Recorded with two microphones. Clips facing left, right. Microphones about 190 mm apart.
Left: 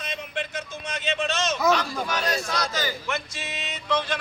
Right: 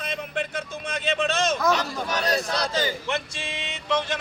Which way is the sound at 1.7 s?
40° right (ahead or behind).